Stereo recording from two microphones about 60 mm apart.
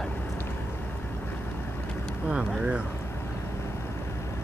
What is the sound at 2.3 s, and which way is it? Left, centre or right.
Speech, centre.